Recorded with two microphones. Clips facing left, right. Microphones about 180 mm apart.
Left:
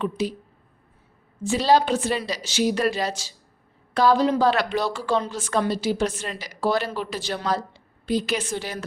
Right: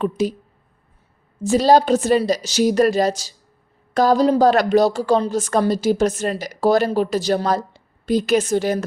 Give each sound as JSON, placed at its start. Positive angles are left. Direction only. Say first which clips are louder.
{"t": 0.0, "sound": "a woman's voice", "louder": "right 5 dB", "side_deg": -45}
{"t": 1.4, "sound": "a woman's voice", "louder": "right 5 dB", "side_deg": -40}